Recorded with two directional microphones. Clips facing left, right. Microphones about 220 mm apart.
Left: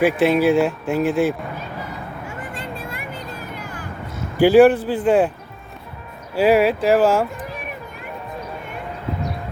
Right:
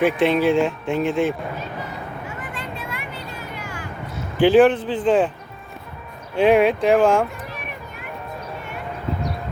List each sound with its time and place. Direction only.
0.0 s speech: 5° left (ahead or behind)
2.5 s vehicle: 50° left (ahead or behind)
4.4 s speech: 10° left (ahead or behind)
6.3 s speech: 5° left (ahead or behind)